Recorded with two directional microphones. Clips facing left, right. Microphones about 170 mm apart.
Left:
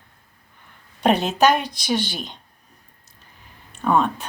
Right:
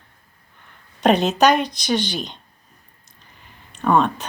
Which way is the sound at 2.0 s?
50° left (ahead or behind).